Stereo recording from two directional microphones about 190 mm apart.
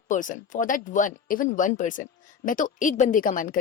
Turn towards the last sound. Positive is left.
turn(degrees=45)  # may be behind; listen again after turning